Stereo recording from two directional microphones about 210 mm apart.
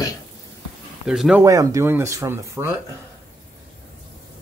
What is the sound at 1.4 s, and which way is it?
Speech, 15° right (ahead or behind).